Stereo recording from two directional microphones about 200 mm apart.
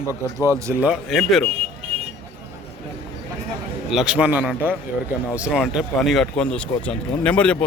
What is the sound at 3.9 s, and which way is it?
A man's voice, 5° right (ahead or behind).